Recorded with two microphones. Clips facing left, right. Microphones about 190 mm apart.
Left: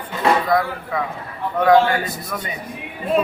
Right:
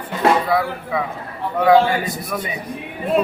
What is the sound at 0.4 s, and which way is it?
A man's voice, 5° right (ahead or behind).